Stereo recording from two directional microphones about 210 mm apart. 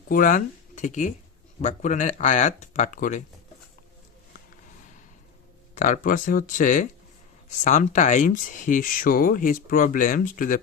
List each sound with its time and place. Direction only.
0.1 s speech: 40° left (ahead or behind)
5.7 s speech: 35° left (ahead or behind)